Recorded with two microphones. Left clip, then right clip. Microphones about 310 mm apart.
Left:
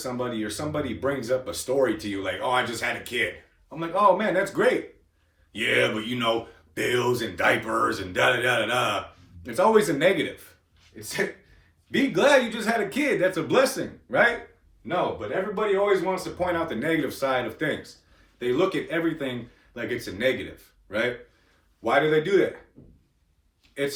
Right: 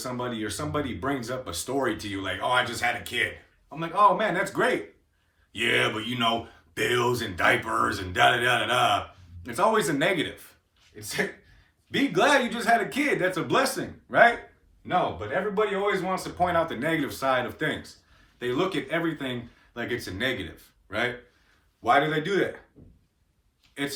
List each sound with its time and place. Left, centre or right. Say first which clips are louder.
0.0 s speech: left 2 dB; centre
11.9 s speech: left 2 dB; centre
21.8 s speech: left 1 dB; centre